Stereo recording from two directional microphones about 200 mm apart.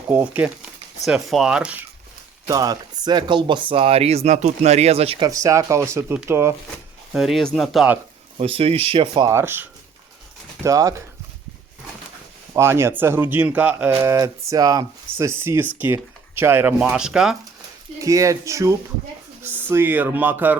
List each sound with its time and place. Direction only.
0.1 s speech: 10° right (ahead or behind)
2.5 s speech: 20° right (ahead or behind)
6.7 s speech: centre (ahead or behind)
8.4 s speech: 30° right (ahead or behind)
9.3 s speech: 10° right (ahead or behind)
12.5 s speech: 10° right (ahead or behind)
18.0 s speech: 15° right (ahead or behind)